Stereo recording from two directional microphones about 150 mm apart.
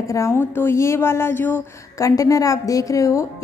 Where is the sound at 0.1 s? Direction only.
20° left (ahead or behind).